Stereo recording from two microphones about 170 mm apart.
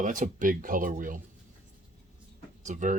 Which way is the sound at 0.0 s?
50° right (ahead or behind).